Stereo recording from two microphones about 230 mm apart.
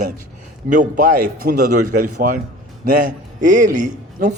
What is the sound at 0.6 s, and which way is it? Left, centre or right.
Speech, right.